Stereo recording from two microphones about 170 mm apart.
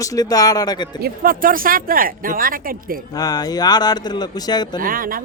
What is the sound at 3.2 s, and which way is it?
Speech, 20° left (ahead or behind).